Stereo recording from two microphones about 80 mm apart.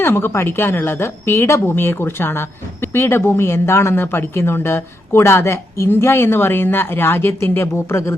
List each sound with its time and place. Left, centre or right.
0.0 s a woman's voice: left